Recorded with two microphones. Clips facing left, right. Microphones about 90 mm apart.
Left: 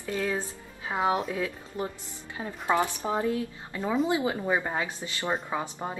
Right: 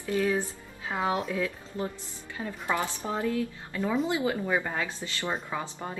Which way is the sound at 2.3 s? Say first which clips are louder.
Left 4 dB; 20° left (ahead or behind).